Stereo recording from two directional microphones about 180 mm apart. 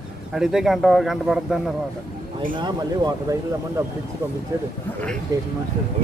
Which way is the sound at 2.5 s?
25° right (ahead or behind).